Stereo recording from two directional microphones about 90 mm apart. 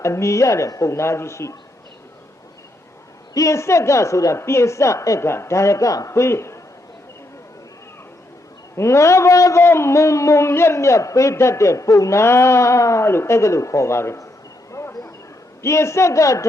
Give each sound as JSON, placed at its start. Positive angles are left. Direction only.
{"t": 0.0, "sound": "a man's voice", "side_deg": 35}
{"t": 3.3, "sound": "a man's voice", "side_deg": 35}
{"t": 8.7, "sound": "a man's voice", "side_deg": 30}
{"t": 14.7, "sound": "a sound", "side_deg": 30}
{"t": 15.6, "sound": "a man's voice", "side_deg": 30}